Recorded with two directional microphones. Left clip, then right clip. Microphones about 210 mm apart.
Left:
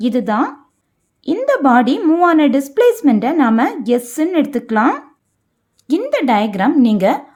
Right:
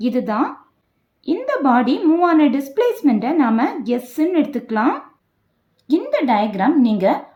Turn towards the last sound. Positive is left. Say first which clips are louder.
# left 3 dB
turn(degrees=45)  # may be behind; listen again after turning